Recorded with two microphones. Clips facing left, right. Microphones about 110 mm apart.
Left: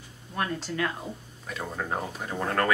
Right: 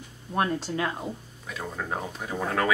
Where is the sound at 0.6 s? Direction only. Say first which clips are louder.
Right 1 dB; 15° right (ahead or behind).